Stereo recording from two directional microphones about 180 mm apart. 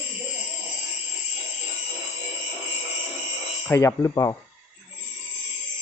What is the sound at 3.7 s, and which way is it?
Speech, 15° left (ahead or behind).